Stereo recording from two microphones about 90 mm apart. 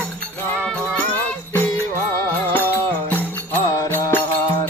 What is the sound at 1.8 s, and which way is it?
Music, 30° left (ahead or behind).